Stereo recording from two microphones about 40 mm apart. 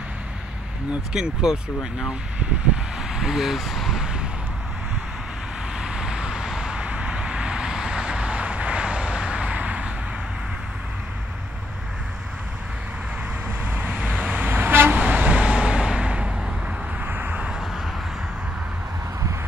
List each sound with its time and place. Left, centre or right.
1.2 s speech: centre
3.0 s a sound: centre
3.5 s speech: centre
4.0 s a sound: right
5.8 s vehicle: centre
6.8 s vehicle: right
13.7 s vehicle: right
14.5 s vehicle: right
15.0 s vehicle: right
17.0 s vehicle: right